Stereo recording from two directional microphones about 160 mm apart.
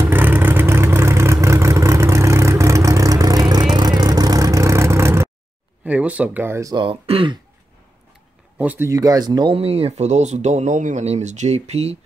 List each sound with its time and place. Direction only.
0.0 s vehicle: 15° right (ahead or behind)
5.9 s speech: 10° right (ahead or behind); by 7.3 s 35° right (ahead or behind)
8.5 s speech: 10° right (ahead or behind); by 12.0 s 40° right (ahead or behind)